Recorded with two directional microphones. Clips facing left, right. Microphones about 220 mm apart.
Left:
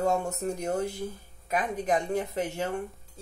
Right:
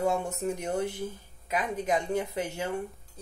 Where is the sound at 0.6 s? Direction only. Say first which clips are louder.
Left 1 dB; 40° left (ahead or behind).